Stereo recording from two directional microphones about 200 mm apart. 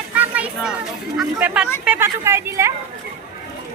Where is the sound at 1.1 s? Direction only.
5° right (ahead or behind).